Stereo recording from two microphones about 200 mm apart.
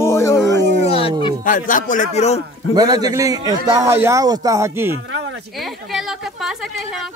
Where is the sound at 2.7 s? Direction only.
20° right (ahead or behind).